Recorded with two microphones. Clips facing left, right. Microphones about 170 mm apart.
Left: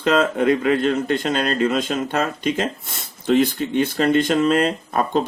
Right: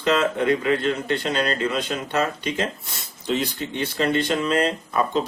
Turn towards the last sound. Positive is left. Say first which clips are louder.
# left 2 dB
turn(degrees=55)  # may be behind; listen again after turning